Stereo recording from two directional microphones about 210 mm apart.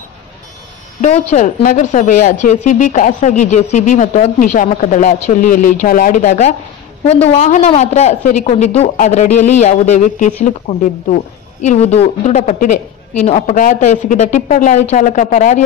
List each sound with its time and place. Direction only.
1.0 s a woman's voice: 35° left (ahead or behind)